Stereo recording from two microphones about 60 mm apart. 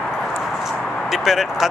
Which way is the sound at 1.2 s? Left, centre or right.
Centre.